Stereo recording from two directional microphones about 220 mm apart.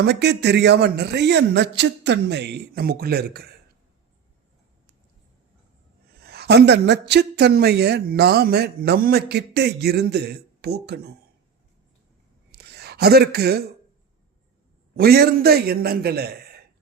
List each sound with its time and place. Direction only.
0.0 s speech: 50° right (ahead or behind)
6.2 s speech: 45° right (ahead or behind)
12.5 s a sound: 50° right (ahead or behind)
14.9 s speech: 45° right (ahead or behind)